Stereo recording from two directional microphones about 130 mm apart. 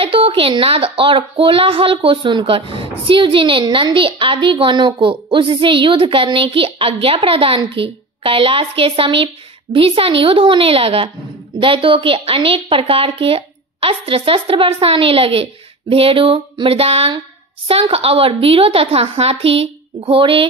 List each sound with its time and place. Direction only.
0.0 s a woman's voice: 45° right (ahead or behind)